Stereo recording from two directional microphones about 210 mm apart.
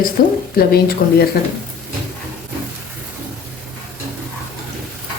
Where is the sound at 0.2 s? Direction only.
45° left (ahead or behind).